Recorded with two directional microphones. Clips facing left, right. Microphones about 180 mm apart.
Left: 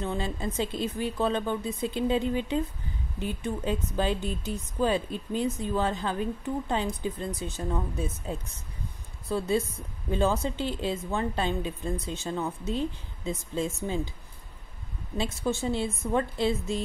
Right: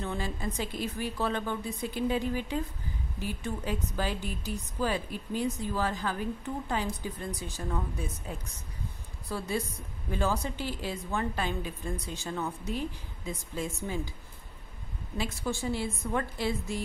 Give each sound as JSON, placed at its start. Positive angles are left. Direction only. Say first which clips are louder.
{"t": 0.0, "sound": "speech", "louder": "left 3 dB", "side_deg": 20}
{"t": 15.1, "sound": "speech", "louder": "left 4 dB", "side_deg": 25}